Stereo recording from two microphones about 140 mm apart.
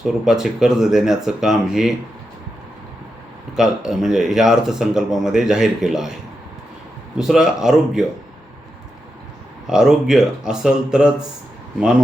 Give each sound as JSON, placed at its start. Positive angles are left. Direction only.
{"t": 0.0, "sound": "speech", "side_deg": -5}
{"t": 3.5, "sound": "speech", "side_deg": -5}
{"t": 7.2, "sound": "speech", "side_deg": -5}
{"t": 9.6, "sound": "speech", "side_deg": -5}